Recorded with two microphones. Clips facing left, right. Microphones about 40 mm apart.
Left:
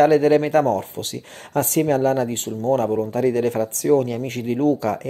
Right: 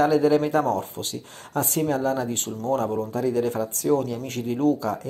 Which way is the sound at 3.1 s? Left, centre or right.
Left.